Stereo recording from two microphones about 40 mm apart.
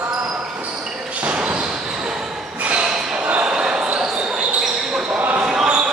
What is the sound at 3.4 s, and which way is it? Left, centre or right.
Basketball bounce, right.